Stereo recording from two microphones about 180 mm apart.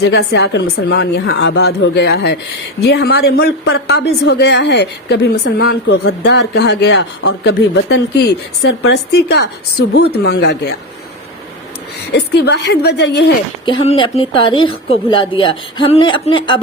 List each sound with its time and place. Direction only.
0.0 s a woman's voice: 80° left
12.1 s a woman's voice: 65° left (ahead or behind)
13.7 s a woman's voice: 30° left (ahead or behind)